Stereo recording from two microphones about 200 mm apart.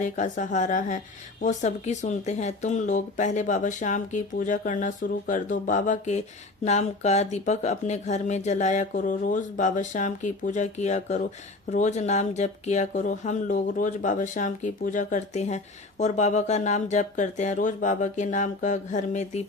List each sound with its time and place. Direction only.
0.0 s speech: 40° left (ahead or behind)